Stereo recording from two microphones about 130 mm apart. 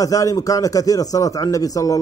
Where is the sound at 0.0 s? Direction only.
25° left (ahead or behind).